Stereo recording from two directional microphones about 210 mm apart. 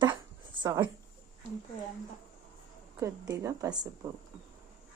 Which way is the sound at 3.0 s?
15° right (ahead or behind).